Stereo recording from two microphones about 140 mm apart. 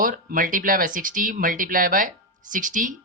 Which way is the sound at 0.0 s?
80° right.